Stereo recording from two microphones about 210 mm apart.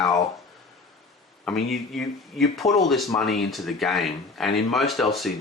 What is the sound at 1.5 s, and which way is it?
Speech, centre (ahead or behind).